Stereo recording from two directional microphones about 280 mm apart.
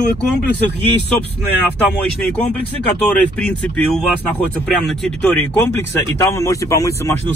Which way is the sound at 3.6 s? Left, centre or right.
Centre.